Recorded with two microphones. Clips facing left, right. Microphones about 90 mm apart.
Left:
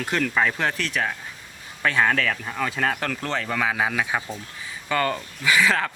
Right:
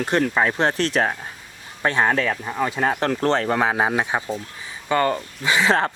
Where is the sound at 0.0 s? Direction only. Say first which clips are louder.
Right 3 dB; 30° right (ahead or behind).